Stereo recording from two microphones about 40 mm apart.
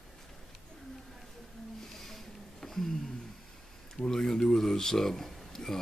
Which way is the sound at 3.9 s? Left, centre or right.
Centre.